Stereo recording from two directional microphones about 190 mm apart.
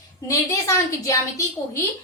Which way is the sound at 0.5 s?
15° left (ahead or behind).